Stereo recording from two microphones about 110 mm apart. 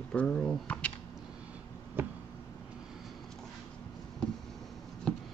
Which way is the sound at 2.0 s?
20° right (ahead or behind).